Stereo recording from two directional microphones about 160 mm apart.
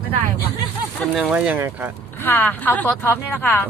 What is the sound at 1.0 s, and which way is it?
Speech, 5° right (ahead or behind).